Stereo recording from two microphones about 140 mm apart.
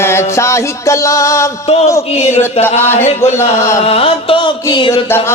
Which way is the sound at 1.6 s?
50° left (ahead or behind).